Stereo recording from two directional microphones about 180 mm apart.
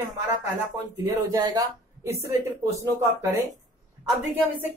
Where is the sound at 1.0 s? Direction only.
20° right (ahead or behind).